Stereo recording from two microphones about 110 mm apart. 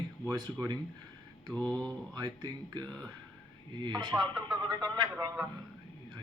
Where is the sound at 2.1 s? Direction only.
40° right (ahead or behind).